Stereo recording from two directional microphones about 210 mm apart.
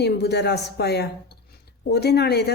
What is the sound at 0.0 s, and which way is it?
Speech, 50° left (ahead or behind).